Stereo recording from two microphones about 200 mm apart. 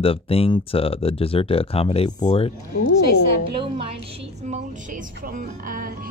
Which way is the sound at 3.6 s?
30° right (ahead or behind).